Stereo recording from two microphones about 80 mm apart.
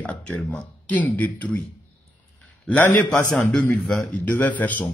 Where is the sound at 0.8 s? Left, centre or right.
Centre.